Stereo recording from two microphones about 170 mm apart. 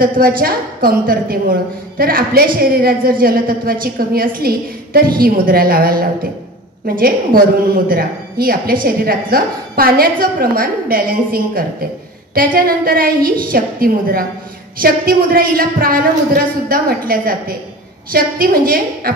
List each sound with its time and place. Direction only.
0.0 s a woman's voice: 60° right (ahead or behind)